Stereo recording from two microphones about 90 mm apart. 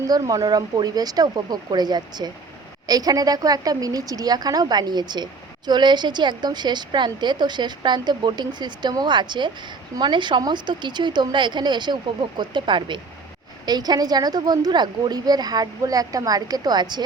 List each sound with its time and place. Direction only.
0.1 s a woman's voice: 45° right (ahead or behind); by 13.0 s 60° right (ahead or behind)
13.7 s a woman's voice: 50° right (ahead or behind)